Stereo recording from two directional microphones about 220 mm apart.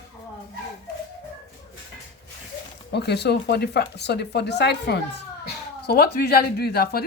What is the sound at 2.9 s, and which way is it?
A woman's voice, 50° left (ahead or behind).